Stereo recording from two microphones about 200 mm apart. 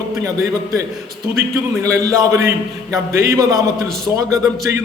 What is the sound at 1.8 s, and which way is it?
A man's voice, 15° right (ahead or behind).